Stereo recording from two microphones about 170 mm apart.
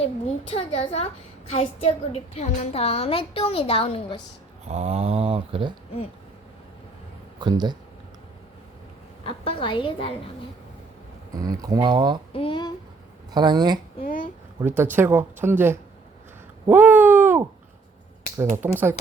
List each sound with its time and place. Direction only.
0.0 s a woman's voice: 35° left (ahead or behind)
4.6 s speech: 40° right (ahead or behind)
7.3 s speech: 25° right (ahead or behind)
9.2 s a woman's voice: 30° left (ahead or behind)
11.3 s speech: 20° right (ahead or behind)
12.3 s speech: 30° left (ahead or behind)
13.3 s speech: 25° right (ahead or behind)
14.0 s speech: 55° left (ahead or behind)
14.6 s speech: 15° right (ahead or behind)
16.6 s a sound: 10° right (ahead or behind)
18.6 s speech: 15° right (ahead or behind)